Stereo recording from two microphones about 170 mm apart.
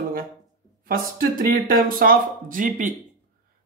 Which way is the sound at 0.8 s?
55° right (ahead or behind).